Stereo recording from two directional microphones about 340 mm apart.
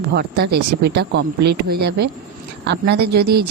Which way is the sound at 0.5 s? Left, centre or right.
Right.